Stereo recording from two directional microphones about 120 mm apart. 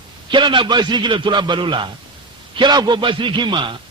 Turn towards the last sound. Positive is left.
turn(degrees=-40)  # may be behind; listen again after turning